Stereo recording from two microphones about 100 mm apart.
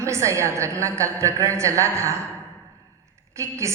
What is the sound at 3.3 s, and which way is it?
Speech, 30° right (ahead or behind).